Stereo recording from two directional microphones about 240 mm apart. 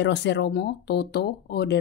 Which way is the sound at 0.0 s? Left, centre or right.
Left.